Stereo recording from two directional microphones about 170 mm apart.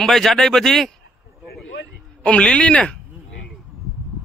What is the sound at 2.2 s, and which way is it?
Speech, 5° left (ahead or behind).